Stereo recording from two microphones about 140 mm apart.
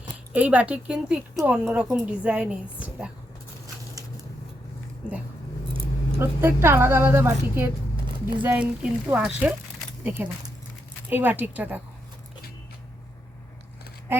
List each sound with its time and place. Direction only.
0.3 s a woman's voice: 10° right (ahead or behind)
6.1 s a woman's voice: 15° right (ahead or behind)